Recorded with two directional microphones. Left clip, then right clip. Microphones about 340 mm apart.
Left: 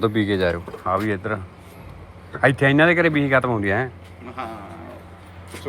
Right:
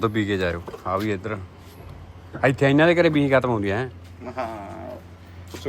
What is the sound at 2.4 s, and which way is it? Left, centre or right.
Speech, centre.